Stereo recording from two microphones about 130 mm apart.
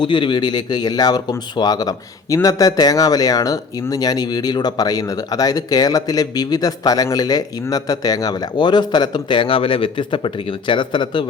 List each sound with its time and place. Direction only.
0.0 s speech: 35° left (ahead or behind)